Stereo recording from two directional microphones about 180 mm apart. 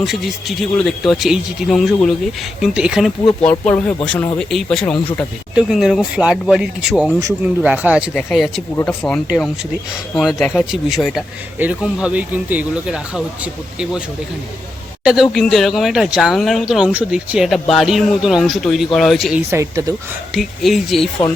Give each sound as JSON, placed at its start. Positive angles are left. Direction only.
{"t": 0.0, "sound": "speech", "side_deg": 0}
{"t": 3.6, "sound": "speech", "side_deg": 5}
{"t": 8.7, "sound": "speech", "side_deg": 10}
{"t": 15.0, "sound": "speech", "side_deg": 0}
{"t": 19.5, "sound": "speech", "side_deg": -15}
{"t": 20.3, "sound": "speech", "side_deg": 0}